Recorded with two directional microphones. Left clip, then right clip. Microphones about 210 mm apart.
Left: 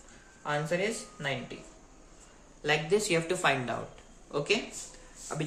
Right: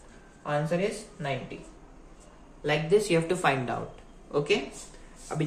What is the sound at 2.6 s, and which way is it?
Speech, 20° left (ahead or behind).